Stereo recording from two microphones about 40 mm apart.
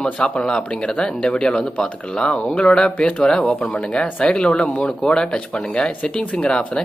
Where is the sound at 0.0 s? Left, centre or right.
Left.